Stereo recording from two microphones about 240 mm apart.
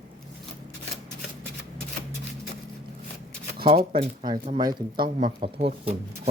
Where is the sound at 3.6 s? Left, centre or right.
Right.